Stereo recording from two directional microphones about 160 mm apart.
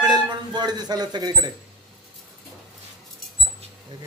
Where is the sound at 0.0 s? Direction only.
25° right (ahead or behind).